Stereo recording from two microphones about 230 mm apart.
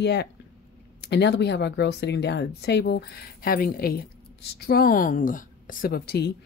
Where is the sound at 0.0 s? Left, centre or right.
Left.